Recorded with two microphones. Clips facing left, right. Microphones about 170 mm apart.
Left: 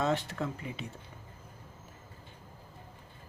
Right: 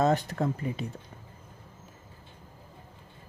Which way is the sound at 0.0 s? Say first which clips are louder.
Right 5 dB; 40° right (ahead or behind).